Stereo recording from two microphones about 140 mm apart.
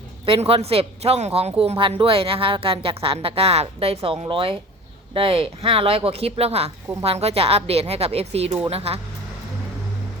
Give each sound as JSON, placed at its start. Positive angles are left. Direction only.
{"t": 0.4, "sound": "a woman's voice", "side_deg": -45}